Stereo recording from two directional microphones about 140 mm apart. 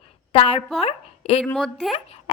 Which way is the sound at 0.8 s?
45° left (ahead or behind).